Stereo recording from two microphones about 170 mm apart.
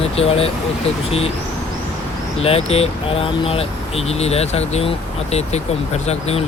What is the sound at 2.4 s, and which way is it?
Speech, 35° left (ahead or behind).